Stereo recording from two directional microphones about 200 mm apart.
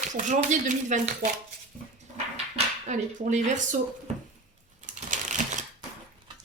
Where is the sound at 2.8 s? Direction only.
35° right (ahead or behind).